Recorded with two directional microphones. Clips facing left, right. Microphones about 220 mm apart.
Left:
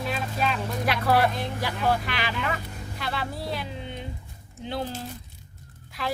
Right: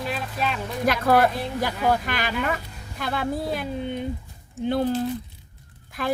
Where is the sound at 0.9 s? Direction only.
45° right (ahead or behind).